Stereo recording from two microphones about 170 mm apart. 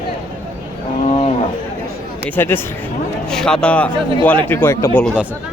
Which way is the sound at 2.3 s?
10° left (ahead or behind).